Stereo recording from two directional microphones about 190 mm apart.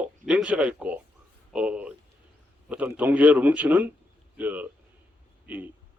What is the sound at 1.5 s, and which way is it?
A man's voice, 5° right (ahead or behind).